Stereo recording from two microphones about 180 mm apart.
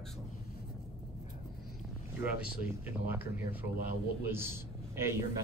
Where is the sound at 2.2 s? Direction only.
10° right (ahead or behind).